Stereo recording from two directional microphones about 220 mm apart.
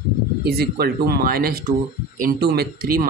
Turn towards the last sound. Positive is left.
turn(degrees=-45)  # may be behind; listen again after turning